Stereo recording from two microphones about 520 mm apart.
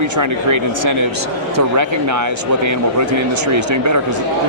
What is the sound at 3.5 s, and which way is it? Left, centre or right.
Speech, right.